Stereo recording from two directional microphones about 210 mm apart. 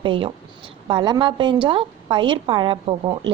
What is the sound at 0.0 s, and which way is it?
A woman's voice, 25° right (ahead or behind).